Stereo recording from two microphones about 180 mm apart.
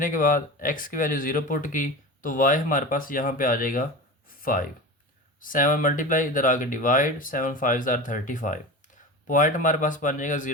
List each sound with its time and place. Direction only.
0.0 s speech: 50° left (ahead or behind)
4.4 s a sound: 50° left (ahead or behind)
5.4 s speech: 50° left (ahead or behind)